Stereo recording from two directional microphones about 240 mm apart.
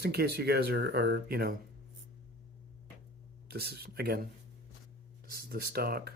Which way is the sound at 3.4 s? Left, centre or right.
Right.